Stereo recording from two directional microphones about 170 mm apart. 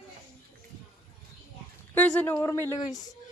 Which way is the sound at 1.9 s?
10° left (ahead or behind).